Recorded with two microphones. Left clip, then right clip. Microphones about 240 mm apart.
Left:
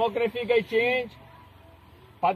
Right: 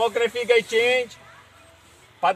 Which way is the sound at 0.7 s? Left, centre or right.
Centre.